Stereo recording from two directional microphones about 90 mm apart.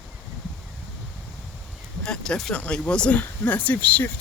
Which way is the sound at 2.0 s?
10° left (ahead or behind).